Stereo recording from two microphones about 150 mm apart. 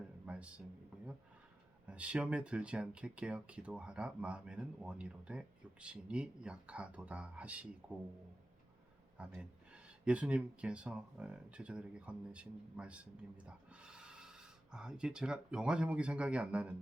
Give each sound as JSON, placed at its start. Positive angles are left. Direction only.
{"t": 0.3, "sound": "a sound", "side_deg": -10}
{"t": 1.9, "sound": "speech", "side_deg": -10}
{"t": 9.1, "sound": "speech", "side_deg": -10}